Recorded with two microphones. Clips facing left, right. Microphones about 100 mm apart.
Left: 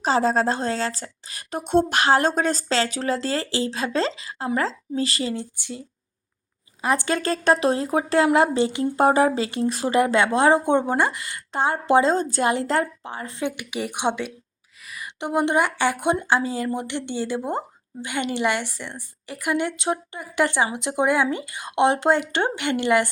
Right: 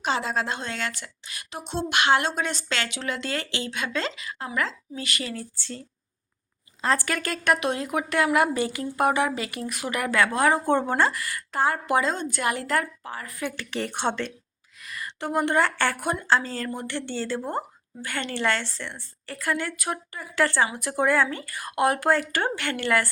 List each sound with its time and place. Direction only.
0.0 s a woman's voice: 35° left (ahead or behind); by 5.8 s 15° left (ahead or behind)
6.8 s speech: 20° left (ahead or behind)
13.6 s a woman's voice: 10° left (ahead or behind)
15.2 s a woman's voice: 20° left (ahead or behind)